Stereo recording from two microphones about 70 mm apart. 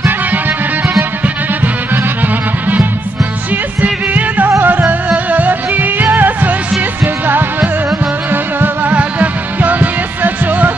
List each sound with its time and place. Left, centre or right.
2.2 s music: right